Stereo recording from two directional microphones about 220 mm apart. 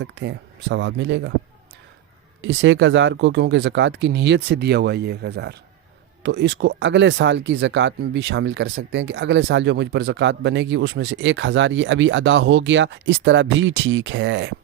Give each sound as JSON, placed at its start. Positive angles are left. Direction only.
{"t": 0.0, "sound": "speech", "side_deg": -55}
{"t": 2.4, "sound": "speech", "side_deg": -55}